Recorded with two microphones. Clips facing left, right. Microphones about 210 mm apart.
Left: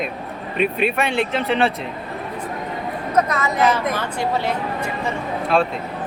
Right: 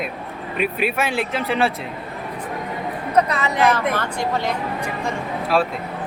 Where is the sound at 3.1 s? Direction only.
30° right (ahead or behind).